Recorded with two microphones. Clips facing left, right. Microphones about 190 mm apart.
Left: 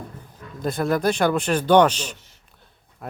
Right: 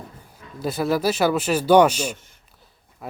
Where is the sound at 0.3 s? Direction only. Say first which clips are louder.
Even; 5° right (ahead or behind).